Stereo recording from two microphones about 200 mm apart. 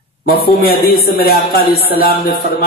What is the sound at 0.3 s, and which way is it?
A man's voice, 50° left (ahead or behind).